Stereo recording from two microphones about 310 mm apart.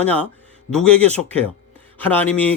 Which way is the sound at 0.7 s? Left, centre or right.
Centre.